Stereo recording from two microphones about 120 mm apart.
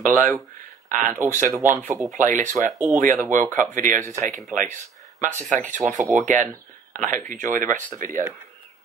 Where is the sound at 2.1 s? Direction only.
90° right.